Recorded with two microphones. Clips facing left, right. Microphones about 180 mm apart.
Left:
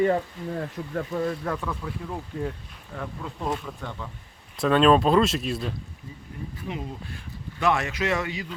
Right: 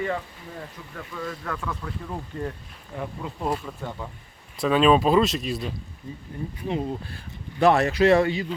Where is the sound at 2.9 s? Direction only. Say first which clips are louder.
Right 2 dB; 15° right (ahead or behind).